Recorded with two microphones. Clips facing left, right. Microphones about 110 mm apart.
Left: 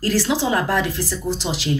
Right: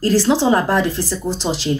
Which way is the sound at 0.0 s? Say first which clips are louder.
Right 5 dB; 30° right (ahead or behind).